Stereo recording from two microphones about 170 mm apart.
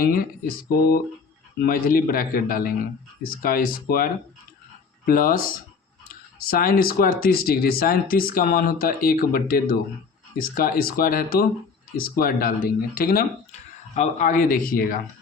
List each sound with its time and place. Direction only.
0.0 s speech: 60° left (ahead or behind)
13.9 s speech: 45° left (ahead or behind)